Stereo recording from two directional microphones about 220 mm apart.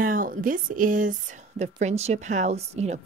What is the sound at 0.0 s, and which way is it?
A woman's voice, 40° right (ahead or behind).